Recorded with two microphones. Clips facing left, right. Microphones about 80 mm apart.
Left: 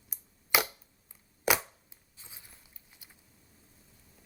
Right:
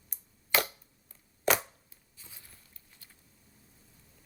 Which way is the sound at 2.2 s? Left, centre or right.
Left.